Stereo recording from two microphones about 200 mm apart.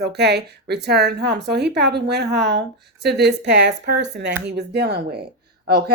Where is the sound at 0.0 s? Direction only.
55° right (ahead or behind).